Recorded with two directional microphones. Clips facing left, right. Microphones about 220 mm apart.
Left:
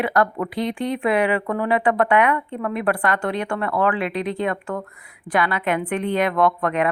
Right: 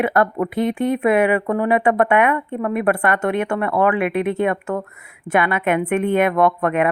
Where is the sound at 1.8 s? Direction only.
25° right (ahead or behind).